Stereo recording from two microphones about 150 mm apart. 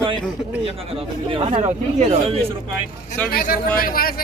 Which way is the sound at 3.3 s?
90° left.